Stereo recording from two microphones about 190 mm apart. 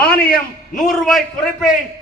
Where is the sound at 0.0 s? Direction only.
55° left (ahead or behind).